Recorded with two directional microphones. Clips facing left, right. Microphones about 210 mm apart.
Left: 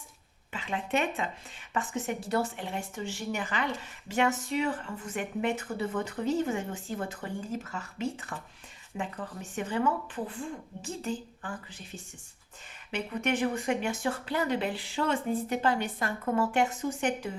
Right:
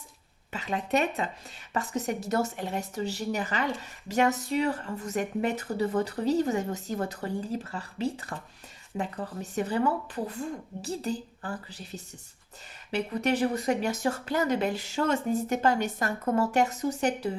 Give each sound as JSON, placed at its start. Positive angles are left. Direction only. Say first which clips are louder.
{"t": 0.5, "sound": "speech", "louder": "right 3 dB", "side_deg": -40}